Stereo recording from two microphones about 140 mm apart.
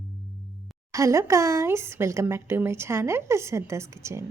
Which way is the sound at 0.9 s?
20° right (ahead or behind).